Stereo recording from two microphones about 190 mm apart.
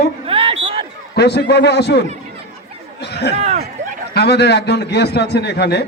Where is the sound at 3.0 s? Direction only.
60° left (ahead or behind).